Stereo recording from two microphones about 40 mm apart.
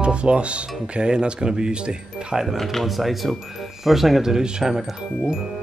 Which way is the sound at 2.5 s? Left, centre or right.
Centre.